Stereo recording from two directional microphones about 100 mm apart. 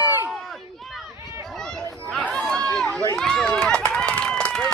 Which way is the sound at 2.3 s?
5° left (ahead or behind).